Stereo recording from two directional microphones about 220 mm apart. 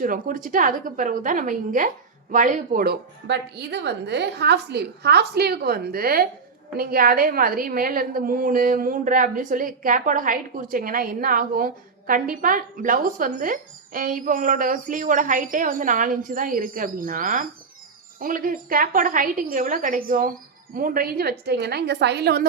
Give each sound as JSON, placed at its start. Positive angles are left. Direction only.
{"t": 0.0, "sound": "a woman's voice", "side_deg": -40}